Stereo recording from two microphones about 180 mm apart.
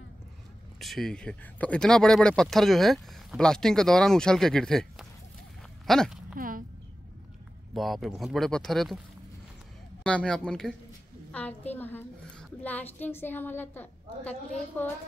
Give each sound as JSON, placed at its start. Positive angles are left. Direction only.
{"t": 0.7, "sound": "speech", "side_deg": 0}
{"t": 6.3, "sound": "a sound", "side_deg": -50}
{"t": 7.7, "sound": "speech", "side_deg": 0}
{"t": 10.0, "sound": "a woman's voice", "side_deg": 5}